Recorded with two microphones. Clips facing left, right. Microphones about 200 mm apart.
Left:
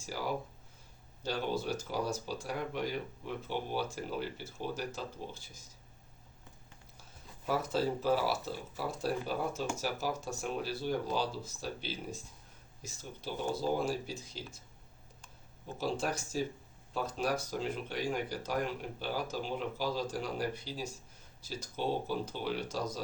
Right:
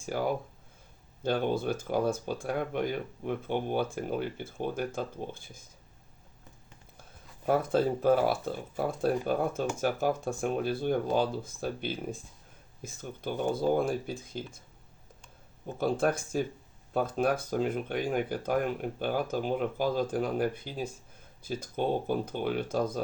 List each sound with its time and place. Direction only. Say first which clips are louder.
0.0 s speech: right 6 dB; 55° right (ahead or behind)
7.4 s speech: right 6 dB; 55° right (ahead or behind)
15.6 s speech: right 7 dB; 55° right (ahead or behind)